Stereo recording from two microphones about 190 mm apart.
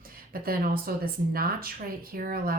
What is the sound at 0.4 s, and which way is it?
A woman's voice, 50° right (ahead or behind).